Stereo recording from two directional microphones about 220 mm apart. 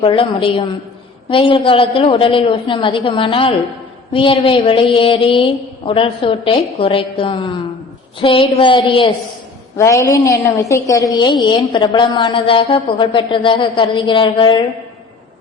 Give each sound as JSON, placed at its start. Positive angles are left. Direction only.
{"t": 0.0, "sound": "a woman's voice", "side_deg": 25}
{"t": 9.7, "sound": "a woman's voice", "side_deg": 15}